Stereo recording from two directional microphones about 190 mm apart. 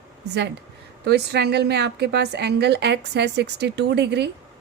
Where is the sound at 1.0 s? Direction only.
60° right (ahead or behind).